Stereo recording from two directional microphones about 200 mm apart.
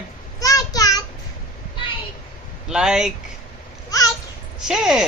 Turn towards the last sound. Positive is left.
turn(degrees=0)  # may be behind; listen again after turning